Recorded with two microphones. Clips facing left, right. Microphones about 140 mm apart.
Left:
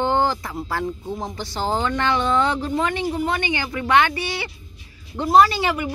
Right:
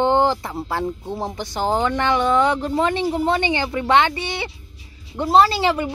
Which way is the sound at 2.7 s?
30° right (ahead or behind).